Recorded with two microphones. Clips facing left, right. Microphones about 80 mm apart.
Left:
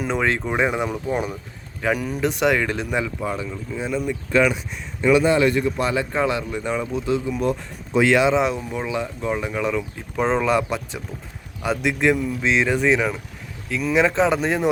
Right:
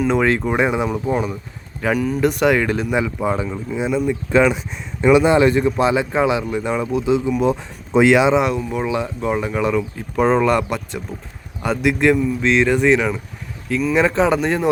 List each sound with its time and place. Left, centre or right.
0.1 s speech: centre
3.2 s speech: right
3.7 s speech: centre
7.1 s speech: centre
8.4 s speech: centre